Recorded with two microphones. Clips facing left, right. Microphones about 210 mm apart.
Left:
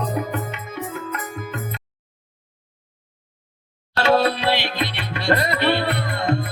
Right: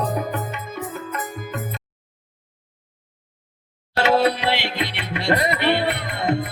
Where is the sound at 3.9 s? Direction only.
20° right (ahead or behind).